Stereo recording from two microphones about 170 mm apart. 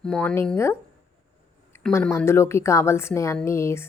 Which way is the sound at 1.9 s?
15° left (ahead or behind).